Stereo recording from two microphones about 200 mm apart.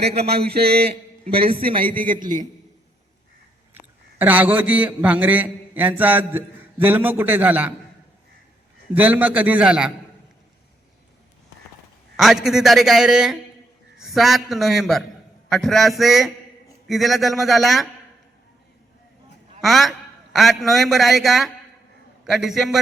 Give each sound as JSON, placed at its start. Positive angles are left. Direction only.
{"t": 0.2, "sound": "a man's voice", "side_deg": -50}
{"t": 1.5, "sound": "a man's voice", "side_deg": -25}
{"t": 1.8, "sound": "a man's voice", "side_deg": -45}
{"t": 4.2, "sound": "a man's voice", "side_deg": -10}
{"t": 9.0, "sound": "a man's voice", "side_deg": -10}
{"t": 12.1, "sound": "a man's voice", "side_deg": 0}
{"t": 19.6, "sound": "a man's voice", "side_deg": 0}